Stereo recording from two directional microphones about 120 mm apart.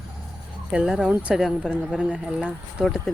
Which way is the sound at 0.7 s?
5° right (ahead or behind).